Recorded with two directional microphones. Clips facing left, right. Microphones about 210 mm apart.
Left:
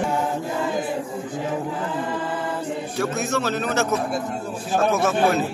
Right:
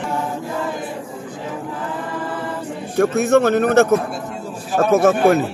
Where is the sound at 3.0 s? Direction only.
55° right (ahead or behind).